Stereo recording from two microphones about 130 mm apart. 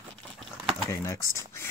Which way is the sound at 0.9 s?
25° left (ahead or behind).